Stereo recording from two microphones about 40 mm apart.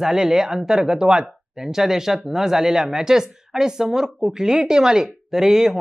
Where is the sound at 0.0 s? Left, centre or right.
Centre.